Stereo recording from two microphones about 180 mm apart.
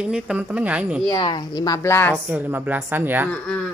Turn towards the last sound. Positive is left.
turn(degrees=5)  # may be behind; listen again after turning